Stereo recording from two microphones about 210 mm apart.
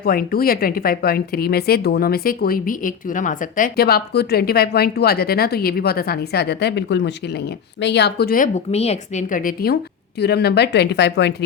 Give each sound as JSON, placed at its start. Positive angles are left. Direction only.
{"t": 0.0, "sound": "speech", "side_deg": 45}